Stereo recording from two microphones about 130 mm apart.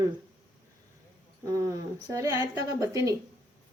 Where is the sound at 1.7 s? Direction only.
25° right (ahead or behind).